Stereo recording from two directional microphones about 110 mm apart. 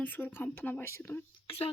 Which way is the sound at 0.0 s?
15° left (ahead or behind).